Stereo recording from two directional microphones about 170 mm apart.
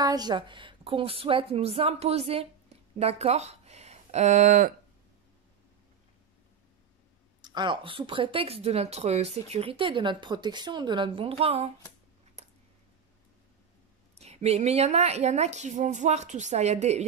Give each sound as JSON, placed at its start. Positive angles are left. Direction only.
{"t": 0.0, "sound": "speech", "side_deg": -25}
{"t": 7.4, "sound": "speech", "side_deg": -25}
{"t": 14.1, "sound": "speech", "side_deg": -40}